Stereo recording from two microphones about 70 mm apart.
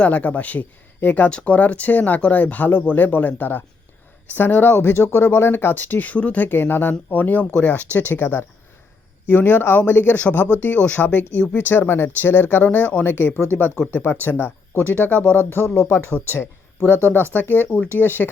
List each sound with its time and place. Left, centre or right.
0.0 s speech: left